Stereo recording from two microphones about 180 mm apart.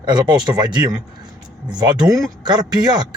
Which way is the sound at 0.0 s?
25° right (ahead or behind).